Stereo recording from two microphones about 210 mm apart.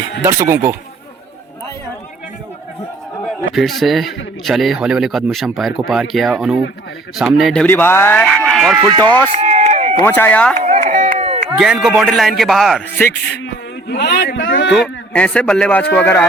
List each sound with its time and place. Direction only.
0.2 s speech: 15° right (ahead or behind)
3.2 s speech: centre (ahead or behind)
8.9 s speech: 20° right (ahead or behind)
9.3 s run: 35° right (ahead or behind)
10.0 s speech: 10° left (ahead or behind)
10.6 s chop: 35° right (ahead or behind)
11.5 s speech: 5° right (ahead or behind)
13.8 s a man's voice: 50° left (ahead or behind)
14.7 s speech: 5° left (ahead or behind)